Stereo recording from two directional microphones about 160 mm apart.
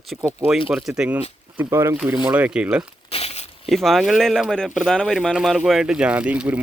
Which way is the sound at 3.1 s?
40° left (ahead or behind).